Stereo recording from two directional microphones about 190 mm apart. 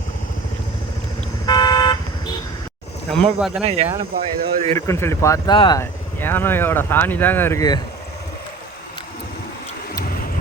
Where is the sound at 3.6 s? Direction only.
35° right (ahead or behind).